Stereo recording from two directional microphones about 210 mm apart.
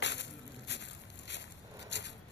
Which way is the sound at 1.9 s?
55° left (ahead or behind).